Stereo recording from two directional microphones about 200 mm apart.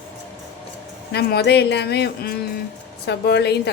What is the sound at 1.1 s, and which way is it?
Speech, 55° left (ahead or behind).